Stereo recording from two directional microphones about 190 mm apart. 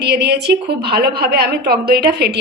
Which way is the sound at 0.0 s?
60° right (ahead or behind).